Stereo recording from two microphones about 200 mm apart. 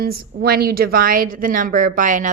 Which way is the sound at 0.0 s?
50° right (ahead or behind).